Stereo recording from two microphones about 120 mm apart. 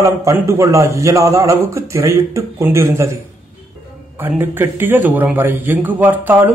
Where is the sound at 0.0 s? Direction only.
25° right (ahead or behind).